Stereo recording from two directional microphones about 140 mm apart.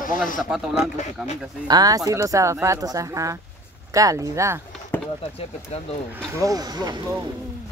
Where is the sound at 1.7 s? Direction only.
25° right (ahead or behind).